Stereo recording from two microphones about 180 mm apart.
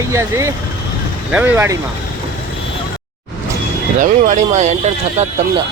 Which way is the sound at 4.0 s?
40° right (ahead or behind).